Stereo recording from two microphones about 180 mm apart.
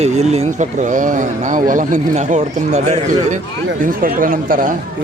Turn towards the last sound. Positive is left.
turn(degrees=-50)  # may be behind; listen again after turning